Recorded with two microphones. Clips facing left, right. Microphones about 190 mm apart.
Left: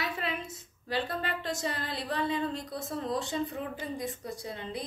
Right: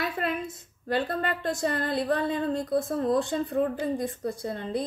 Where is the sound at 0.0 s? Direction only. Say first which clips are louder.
Right 5 dB; 50° right (ahead or behind).